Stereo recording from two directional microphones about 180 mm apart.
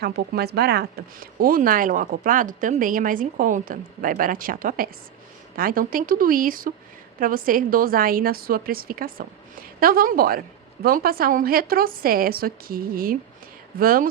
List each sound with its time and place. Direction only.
0.0 s a woman's voice: 60° right (ahead or behind)